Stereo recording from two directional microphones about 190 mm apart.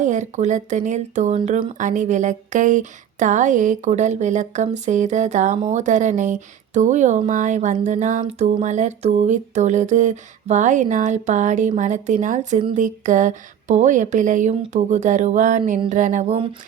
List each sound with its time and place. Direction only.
0.0 s speech: 40° right (ahead or behind)